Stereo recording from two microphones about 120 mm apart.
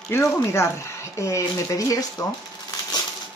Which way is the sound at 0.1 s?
20° left (ahead or behind).